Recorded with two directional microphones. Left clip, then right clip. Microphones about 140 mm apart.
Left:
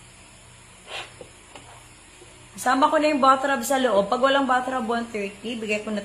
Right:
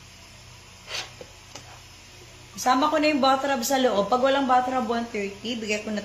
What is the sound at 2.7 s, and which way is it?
Speech, 25° left (ahead or behind).